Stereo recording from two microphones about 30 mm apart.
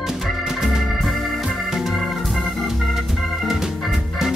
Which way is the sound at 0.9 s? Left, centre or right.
Centre.